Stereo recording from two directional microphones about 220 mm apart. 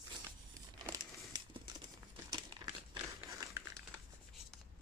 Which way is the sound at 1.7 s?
20° right (ahead or behind).